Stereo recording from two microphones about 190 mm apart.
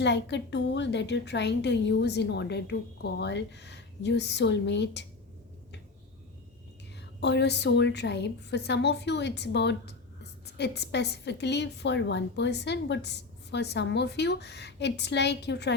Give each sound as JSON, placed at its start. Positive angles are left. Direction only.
{"t": 0.0, "sound": "a woman's voice", "side_deg": 65}
{"t": 7.2, "sound": "a woman's voice", "side_deg": 65}